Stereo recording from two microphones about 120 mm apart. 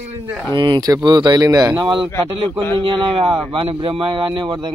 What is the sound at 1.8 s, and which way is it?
Speech, 45° right (ahead or behind).